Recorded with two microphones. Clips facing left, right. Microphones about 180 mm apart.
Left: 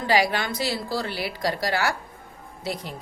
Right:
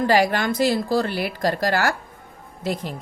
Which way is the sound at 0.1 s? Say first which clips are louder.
Left 1 dB; 50° right (ahead or behind).